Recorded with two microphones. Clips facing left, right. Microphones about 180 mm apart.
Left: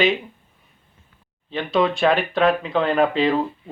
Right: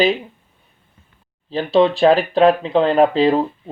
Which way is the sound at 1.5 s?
30° right (ahead or behind).